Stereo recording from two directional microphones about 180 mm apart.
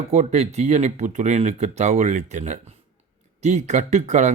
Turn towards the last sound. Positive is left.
turn(degrees=-40)  # may be behind; listen again after turning